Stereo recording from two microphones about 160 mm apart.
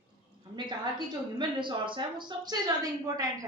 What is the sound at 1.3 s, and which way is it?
A woman's voice, 30° right (ahead or behind).